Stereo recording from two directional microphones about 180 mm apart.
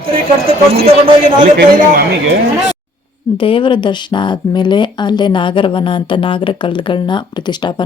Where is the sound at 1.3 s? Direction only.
45° right (ahead or behind).